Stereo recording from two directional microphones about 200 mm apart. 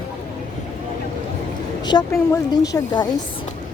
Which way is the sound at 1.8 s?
20° left (ahead or behind).